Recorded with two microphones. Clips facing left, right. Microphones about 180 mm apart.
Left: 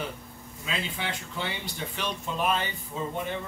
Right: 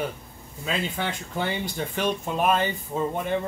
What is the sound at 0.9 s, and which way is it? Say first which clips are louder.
Speech: right 5 dB; 50° right (ahead or behind).